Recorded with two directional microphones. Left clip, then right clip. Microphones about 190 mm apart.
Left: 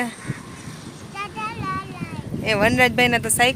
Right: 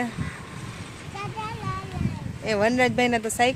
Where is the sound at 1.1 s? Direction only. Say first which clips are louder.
Left 4 dB; 5° left (ahead or behind).